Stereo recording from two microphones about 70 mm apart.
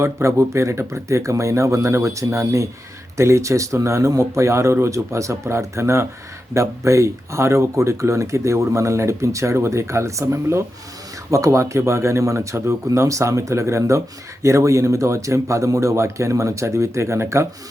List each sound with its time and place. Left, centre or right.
0.0 s speech: right